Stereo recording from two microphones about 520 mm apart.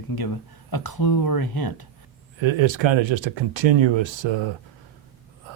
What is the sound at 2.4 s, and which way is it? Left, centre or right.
Speech, right.